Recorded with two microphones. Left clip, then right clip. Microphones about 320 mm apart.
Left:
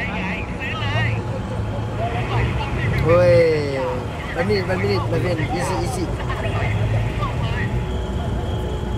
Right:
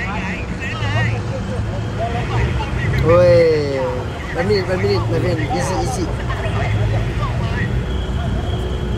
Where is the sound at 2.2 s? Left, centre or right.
Centre.